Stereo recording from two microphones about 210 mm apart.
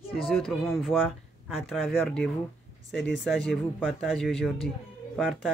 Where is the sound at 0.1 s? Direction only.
Centre (ahead or behind).